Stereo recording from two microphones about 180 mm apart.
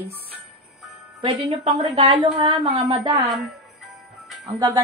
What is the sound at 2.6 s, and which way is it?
Speech, 40° right (ahead or behind).